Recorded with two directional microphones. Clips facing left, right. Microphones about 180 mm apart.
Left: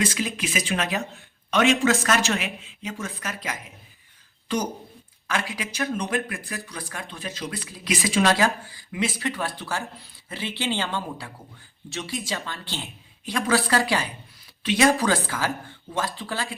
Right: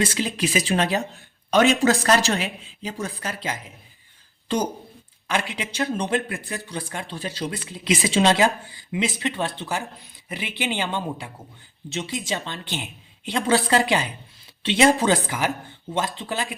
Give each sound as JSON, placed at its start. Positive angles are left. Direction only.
{"t": 0.0, "sound": "a woman's voice", "side_deg": -30}
{"t": 7.5, "sound": "speech", "side_deg": -20}